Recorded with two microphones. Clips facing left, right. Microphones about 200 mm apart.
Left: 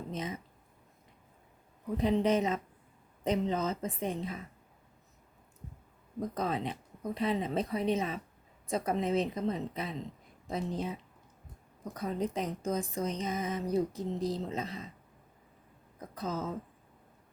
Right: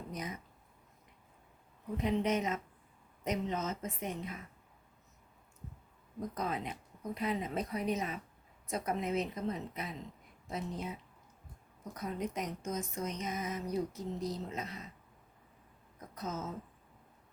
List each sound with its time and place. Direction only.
0.1 s speech: 25° left (ahead or behind)
2.0 s speech: 35° left (ahead or behind)
6.1 s speech: 30° left (ahead or behind)
16.0 s speech: 30° left (ahead or behind)